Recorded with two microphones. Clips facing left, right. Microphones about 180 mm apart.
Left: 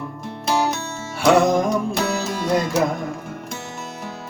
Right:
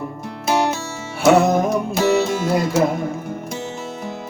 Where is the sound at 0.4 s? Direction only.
15° right (ahead or behind).